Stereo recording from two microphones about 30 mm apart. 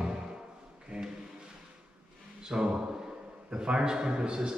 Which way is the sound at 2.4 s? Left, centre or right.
Right.